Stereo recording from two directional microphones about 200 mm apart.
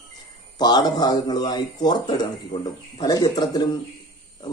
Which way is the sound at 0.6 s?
20° left (ahead or behind).